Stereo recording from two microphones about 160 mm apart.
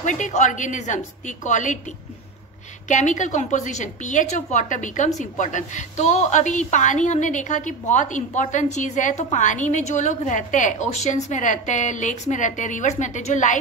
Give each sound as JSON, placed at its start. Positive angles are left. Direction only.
{"t": 0.0, "sound": "a woman's voice", "side_deg": 50}
{"t": 2.9, "sound": "a woman's voice", "side_deg": 50}